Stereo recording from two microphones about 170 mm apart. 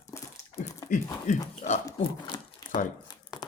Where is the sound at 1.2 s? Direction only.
45° left (ahead or behind).